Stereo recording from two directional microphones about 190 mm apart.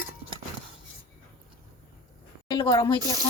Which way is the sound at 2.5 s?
25° left (ahead or behind).